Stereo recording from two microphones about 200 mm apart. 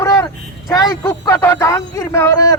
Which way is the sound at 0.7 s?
20° left (ahead or behind).